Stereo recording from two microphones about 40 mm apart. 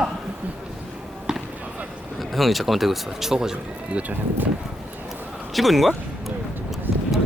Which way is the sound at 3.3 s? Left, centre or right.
Centre.